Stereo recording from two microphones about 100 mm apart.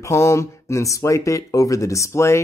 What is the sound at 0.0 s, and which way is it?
Speech, 30° left (ahead or behind).